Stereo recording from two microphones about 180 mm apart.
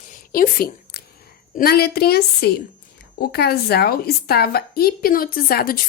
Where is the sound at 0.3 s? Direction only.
55° left (ahead or behind).